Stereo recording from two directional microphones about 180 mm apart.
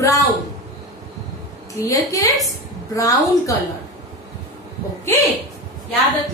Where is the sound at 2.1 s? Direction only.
20° left (ahead or behind).